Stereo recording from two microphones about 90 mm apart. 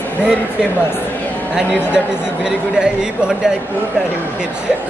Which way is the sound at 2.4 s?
10° right (ahead or behind).